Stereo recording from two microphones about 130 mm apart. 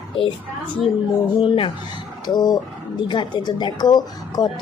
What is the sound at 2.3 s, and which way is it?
Speech, 30° left (ahead or behind).